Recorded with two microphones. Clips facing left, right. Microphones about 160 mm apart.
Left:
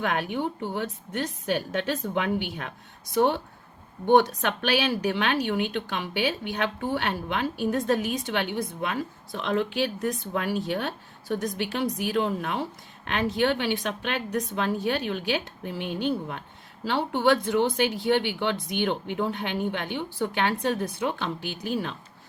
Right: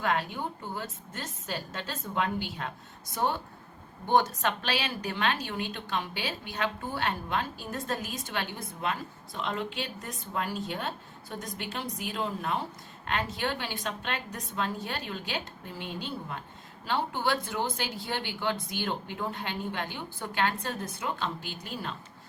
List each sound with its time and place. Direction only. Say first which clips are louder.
0.0 s a woman's voice: left 3 dB; 65° left (ahead or behind)